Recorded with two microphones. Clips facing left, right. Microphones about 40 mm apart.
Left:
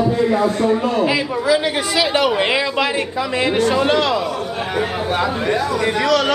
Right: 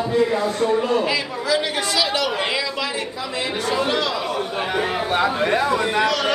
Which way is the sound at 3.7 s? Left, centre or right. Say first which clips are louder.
Left 5 dB; left.